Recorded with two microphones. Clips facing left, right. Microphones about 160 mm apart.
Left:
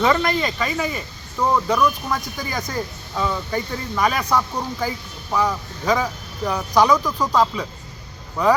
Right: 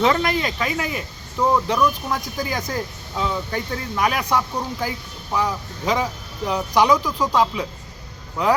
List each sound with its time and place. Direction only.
0.0 s speech: 5° right (ahead or behind)